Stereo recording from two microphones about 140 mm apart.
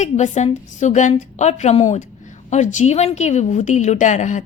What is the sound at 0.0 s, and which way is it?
A woman's voice, 55° left (ahead or behind).